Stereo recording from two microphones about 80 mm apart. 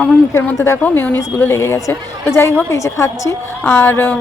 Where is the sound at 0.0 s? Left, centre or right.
Left.